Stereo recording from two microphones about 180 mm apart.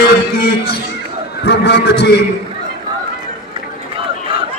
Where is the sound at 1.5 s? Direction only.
70° left (ahead or behind).